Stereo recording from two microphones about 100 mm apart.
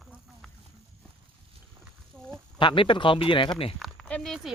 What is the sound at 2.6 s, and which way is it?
Speech, 55° left (ahead or behind).